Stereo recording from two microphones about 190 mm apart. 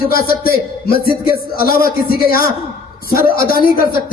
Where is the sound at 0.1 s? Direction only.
50° left (ahead or behind).